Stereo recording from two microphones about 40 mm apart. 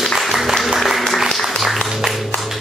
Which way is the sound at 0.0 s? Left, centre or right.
Centre.